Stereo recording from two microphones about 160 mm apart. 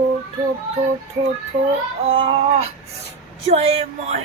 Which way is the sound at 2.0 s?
35° right (ahead or behind).